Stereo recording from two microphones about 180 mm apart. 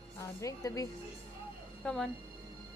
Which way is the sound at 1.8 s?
5° left (ahead or behind).